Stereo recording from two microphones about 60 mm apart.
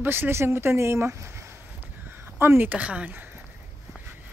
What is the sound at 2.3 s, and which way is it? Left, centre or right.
Speech, right.